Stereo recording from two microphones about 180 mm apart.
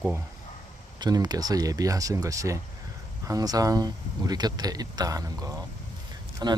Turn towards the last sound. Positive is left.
turn(degrees=-20)  # may be behind; listen again after turning